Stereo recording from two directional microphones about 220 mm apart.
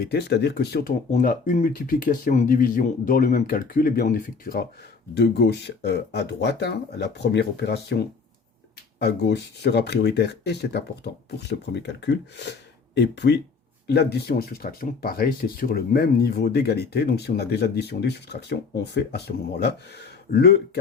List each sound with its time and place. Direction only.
0.0 s speech: 50° left (ahead or behind)